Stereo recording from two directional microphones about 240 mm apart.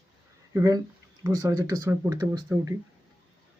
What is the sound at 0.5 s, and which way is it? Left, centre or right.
Speech, centre.